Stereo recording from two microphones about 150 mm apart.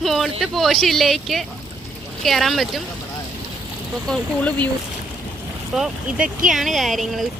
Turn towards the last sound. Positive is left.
turn(degrees=0)  # may be behind; listen again after turning